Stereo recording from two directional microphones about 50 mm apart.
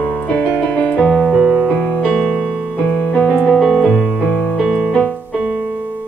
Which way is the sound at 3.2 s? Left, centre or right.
Left.